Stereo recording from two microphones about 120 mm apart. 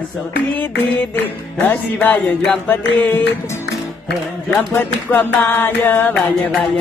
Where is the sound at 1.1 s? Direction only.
15° left (ahead or behind).